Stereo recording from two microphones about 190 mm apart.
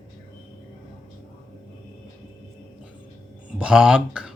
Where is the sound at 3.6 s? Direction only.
5° right (ahead or behind).